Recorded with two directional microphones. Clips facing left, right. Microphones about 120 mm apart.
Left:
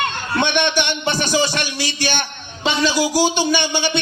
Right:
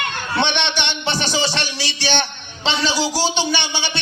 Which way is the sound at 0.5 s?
45° left (ahead or behind).